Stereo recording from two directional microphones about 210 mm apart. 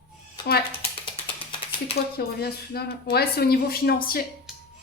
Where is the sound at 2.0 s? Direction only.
50° left (ahead or behind).